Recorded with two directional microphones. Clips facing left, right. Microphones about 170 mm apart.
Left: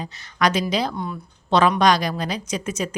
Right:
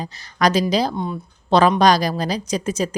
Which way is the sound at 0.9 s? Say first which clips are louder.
Right 4 dB; 20° right (ahead or behind).